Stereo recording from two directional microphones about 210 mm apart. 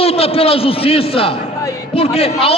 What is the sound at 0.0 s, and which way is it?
A man's voice, 25° left (ahead or behind).